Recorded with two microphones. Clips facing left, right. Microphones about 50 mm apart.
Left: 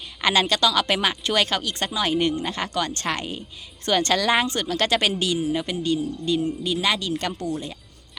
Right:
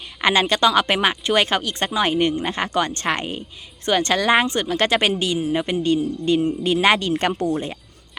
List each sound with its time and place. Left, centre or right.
0.2 s speech: right